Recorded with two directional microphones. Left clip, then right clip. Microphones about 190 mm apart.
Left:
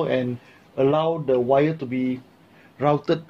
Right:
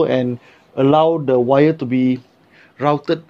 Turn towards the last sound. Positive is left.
turn(degrees=-20)  # may be behind; listen again after turning